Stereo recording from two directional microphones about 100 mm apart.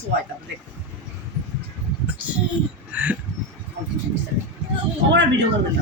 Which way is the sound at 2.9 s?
15° right (ahead or behind).